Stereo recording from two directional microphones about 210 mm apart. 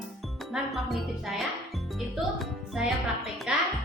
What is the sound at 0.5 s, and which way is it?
Speech, centre (ahead or behind).